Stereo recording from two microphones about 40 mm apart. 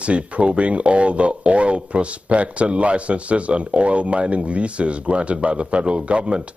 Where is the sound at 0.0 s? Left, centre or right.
Right.